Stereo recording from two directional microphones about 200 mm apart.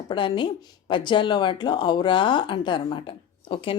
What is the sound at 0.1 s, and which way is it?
A woman's voice, 25° left (ahead or behind).